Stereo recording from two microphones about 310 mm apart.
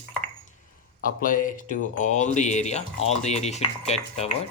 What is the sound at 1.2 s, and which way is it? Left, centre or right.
Speech, left.